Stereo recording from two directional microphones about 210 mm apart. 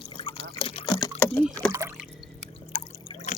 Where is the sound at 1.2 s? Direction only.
10° left (ahead or behind).